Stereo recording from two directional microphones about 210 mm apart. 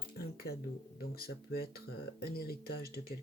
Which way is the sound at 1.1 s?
45° left (ahead or behind).